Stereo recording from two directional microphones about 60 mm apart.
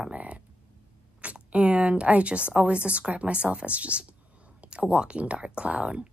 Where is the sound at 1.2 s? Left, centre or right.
Right.